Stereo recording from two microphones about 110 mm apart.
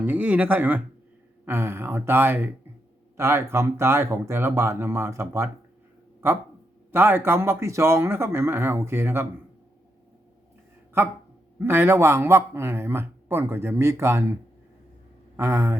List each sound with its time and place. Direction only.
0.0 s speech: 15° right (ahead or behind)
11.6 s speech: 20° right (ahead or behind)
15.4 s speech: 25° right (ahead or behind)